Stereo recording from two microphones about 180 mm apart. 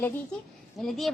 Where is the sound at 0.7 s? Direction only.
Centre (ahead or behind).